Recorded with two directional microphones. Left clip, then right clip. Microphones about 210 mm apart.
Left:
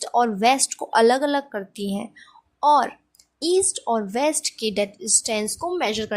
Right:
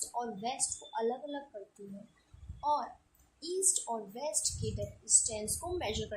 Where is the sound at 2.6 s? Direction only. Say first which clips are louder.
Left 16 dB; 35° left (ahead or behind).